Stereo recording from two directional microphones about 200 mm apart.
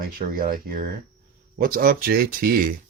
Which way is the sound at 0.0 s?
45° right (ahead or behind).